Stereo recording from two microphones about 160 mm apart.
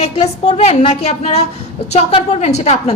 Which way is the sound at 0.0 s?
40° left (ahead or behind).